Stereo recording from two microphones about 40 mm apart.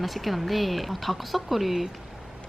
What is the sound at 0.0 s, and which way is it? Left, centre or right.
Speech, centre.